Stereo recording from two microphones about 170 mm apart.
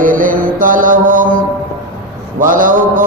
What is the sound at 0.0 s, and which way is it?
Mantra, 50° right (ahead or behind).